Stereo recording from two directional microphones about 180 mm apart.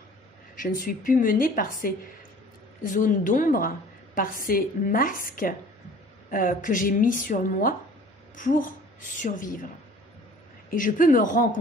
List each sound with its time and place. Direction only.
0.6 s a woman's voice: 50° left (ahead or behind)
10.7 s a woman's voice: 50° left (ahead or behind)